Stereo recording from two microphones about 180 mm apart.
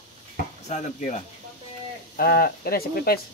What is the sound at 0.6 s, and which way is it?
Speech, 40° left (ahead or behind).